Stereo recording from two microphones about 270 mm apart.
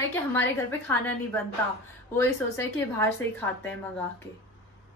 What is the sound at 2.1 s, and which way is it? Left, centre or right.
A woman's voice, centre.